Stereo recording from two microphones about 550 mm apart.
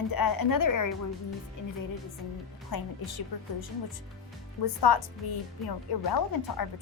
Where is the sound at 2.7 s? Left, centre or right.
Left.